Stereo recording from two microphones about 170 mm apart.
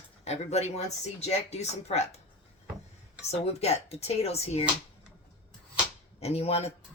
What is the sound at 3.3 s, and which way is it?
A woman's voice, 35° left (ahead or behind).